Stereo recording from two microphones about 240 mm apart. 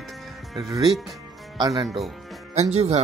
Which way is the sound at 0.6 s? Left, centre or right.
Centre.